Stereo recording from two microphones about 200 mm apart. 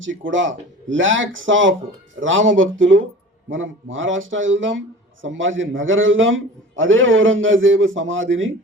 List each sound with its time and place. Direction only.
0.0 s a man's voice: 70° right (ahead or behind)